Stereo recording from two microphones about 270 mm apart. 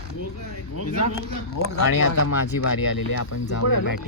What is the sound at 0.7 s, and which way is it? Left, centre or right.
Speech, left.